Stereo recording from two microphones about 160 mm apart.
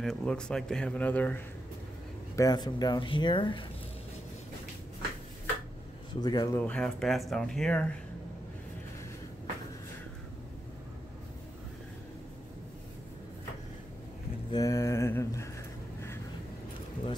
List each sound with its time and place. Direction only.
0.0 s speech: 5° left (ahead or behind)
2.3 s speech: 25° left (ahead or behind)
6.2 s speech: 25° left (ahead or behind)
6.5 s speech: 5° left (ahead or behind)
14.5 s speech: 20° left (ahead or behind)